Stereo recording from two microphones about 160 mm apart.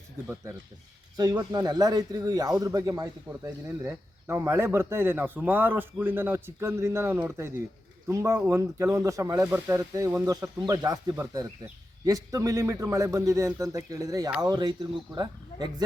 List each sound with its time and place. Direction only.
1.1 s speech: 25° right (ahead or behind)